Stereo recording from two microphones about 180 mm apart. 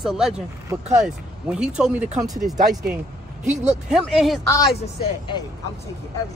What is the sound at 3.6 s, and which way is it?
Speech, centre (ahead or behind).